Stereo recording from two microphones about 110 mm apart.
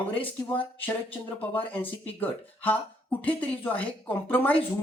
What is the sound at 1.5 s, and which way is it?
Speech, 15° left (ahead or behind).